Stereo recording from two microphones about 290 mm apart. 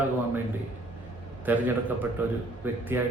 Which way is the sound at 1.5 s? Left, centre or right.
Centre.